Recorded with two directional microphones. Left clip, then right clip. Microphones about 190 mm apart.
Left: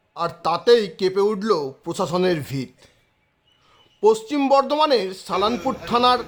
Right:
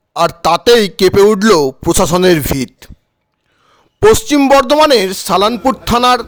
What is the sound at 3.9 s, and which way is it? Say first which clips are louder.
A woman's voice: right 9 dB; 45° right (ahead or behind).